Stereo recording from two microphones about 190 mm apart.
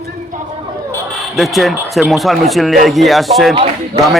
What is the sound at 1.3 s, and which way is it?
A man's voice, centre (ahead or behind).